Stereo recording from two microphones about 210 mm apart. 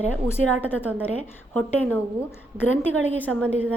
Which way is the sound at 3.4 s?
10° right (ahead or behind).